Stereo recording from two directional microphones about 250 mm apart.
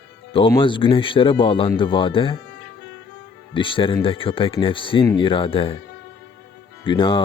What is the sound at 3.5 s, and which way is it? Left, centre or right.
Speech, centre.